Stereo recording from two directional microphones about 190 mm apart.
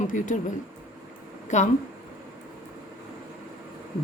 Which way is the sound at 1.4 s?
40° left (ahead or behind).